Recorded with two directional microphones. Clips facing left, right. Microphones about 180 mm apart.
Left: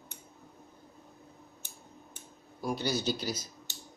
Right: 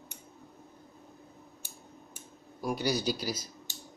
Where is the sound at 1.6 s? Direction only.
10° right (ahead or behind).